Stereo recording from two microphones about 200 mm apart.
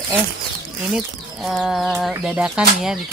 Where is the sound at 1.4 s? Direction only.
Centre (ahead or behind).